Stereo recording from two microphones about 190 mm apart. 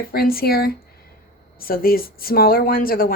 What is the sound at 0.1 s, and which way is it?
Speech, 50° left (ahead or behind).